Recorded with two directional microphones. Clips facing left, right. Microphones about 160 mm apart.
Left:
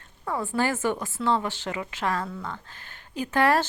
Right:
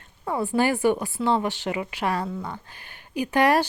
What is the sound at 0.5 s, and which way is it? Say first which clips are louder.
A woman's voice: right 5 dB; 15° right (ahead or behind).